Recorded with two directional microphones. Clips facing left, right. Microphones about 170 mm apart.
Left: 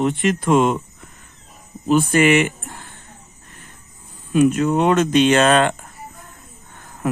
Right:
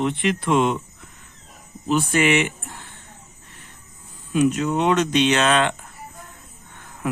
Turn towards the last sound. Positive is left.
turn(degrees=40)  # may be behind; listen again after turning